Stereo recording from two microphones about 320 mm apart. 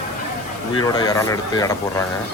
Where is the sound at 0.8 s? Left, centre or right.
Centre.